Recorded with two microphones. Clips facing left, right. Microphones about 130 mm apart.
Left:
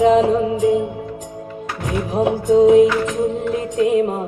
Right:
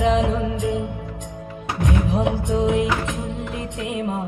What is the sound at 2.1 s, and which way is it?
Music, 40° left (ahead or behind).